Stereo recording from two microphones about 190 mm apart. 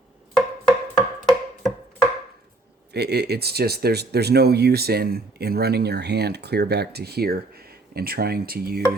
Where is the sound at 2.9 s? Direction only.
60° right (ahead or behind).